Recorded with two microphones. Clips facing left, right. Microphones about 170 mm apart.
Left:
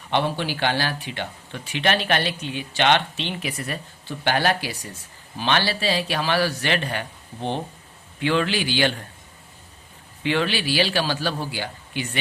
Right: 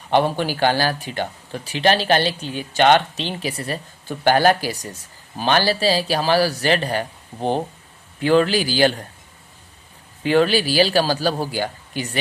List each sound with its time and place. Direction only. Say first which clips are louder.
0.1 s speech: right 5 dB; 45° right (ahead or behind)
10.2 s speech: right 6 dB; 40° right (ahead or behind)